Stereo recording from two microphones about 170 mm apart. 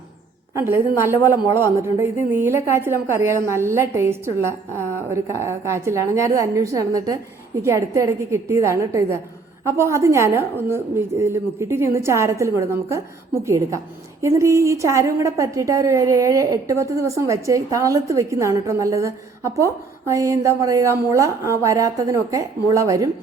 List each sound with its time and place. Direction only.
0.6 s a woman's voice: 15° right (ahead or behind)
5.1 s a woman's voice: 15° right (ahead or behind)